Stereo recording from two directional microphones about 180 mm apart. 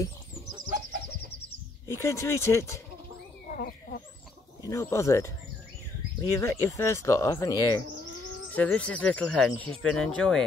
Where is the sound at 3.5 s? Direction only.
50° left (ahead or behind).